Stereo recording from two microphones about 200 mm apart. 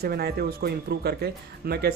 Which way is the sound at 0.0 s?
50° right (ahead or behind).